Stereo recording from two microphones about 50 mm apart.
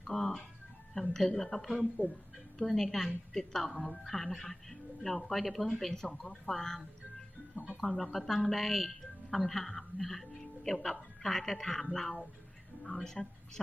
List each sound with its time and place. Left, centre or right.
0.1 s music: centre
0.9 s a woman's voice: left
1.4 s speech: centre
7.6 s music: right
7.9 s speech: centre